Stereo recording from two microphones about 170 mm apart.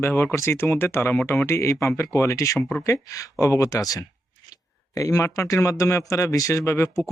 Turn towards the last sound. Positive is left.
turn(degrees=15)  # may be behind; listen again after turning